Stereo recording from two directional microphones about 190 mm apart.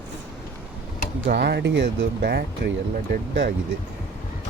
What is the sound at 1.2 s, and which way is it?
Speech, 60° right (ahead or behind).